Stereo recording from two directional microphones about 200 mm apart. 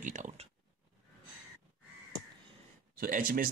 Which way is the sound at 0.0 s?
40° right (ahead or behind).